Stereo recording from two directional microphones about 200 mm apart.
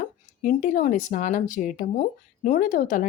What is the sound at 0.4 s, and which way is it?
Speech, 40° left (ahead or behind).